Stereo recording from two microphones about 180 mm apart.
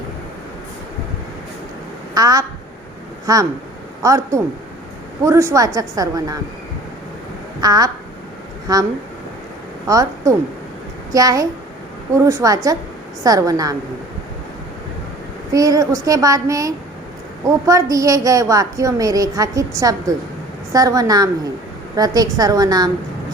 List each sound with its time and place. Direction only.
2.1 s a woman's voice: 20° right (ahead or behind)
7.6 s a woman's voice: 20° right (ahead or behind)
15.5 s a woman's voice: 20° right (ahead or behind)